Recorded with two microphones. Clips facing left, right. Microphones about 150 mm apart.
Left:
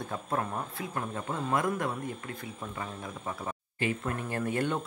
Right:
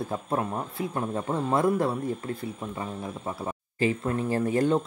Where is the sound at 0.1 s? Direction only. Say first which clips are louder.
Right 1 dB; 25° right (ahead or behind).